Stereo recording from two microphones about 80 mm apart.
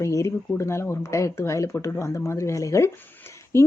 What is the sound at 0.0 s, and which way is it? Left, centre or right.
A woman's voice, left.